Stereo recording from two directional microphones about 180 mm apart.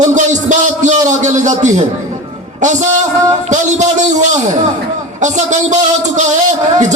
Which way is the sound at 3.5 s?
40° right (ahead or behind).